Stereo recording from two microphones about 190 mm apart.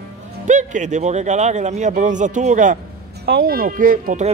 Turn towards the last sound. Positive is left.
turn(degrees=-45)  # may be behind; listen again after turning